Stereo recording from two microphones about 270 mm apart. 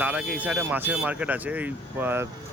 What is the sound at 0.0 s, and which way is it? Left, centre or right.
Speech, centre.